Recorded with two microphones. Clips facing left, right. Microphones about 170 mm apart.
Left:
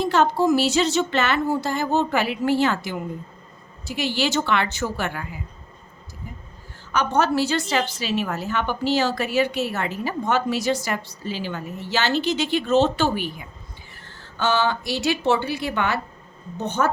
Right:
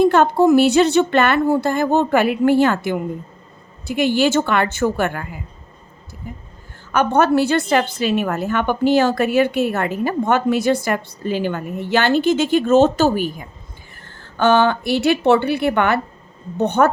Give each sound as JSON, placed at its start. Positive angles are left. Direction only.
{"t": 0.0, "sound": "a woman's voice", "side_deg": -55}
{"t": 6.9, "sound": "a woman's voice", "side_deg": -55}
{"t": 14.2, "sound": "speech", "side_deg": -55}